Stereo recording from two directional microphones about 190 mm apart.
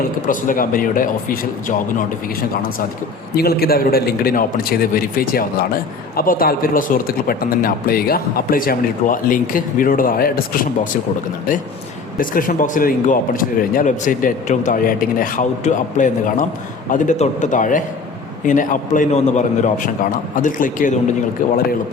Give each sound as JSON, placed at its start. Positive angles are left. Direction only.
{"t": 0.3, "sound": "a man's voice", "side_deg": 45}
{"t": 12.2, "sound": "a man's voice", "side_deg": 45}